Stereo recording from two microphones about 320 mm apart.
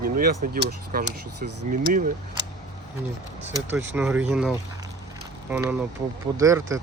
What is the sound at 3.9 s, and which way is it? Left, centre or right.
Speech, centre.